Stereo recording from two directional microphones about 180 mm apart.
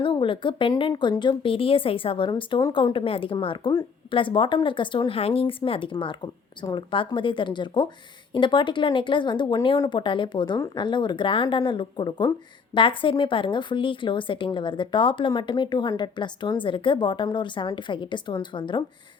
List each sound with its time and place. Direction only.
0.0 s a woman's voice: 30° left (ahead or behind)